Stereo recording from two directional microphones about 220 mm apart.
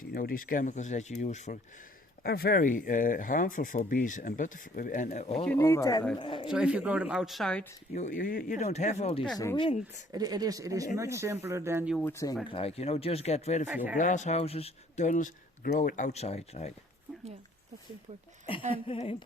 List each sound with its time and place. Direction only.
0.1 s speech: 40° left (ahead or behind)
2.2 s speech: 45° left (ahead or behind)
5.5 s speech: 15° left (ahead or behind)
6.5 s speech: 5° right (ahead or behind)
7.9 s speech: 35° left (ahead or behind)
10.1 s speech: 15° right (ahead or behind)
11.9 s speech: 10° left (ahead or behind)
12.5 s speech: 25° left (ahead or behind)
13.7 s speech: 10° right (ahead or behind)
13.9 s speech: 35° left (ahead or behind)
18.4 s speech: 25° left (ahead or behind)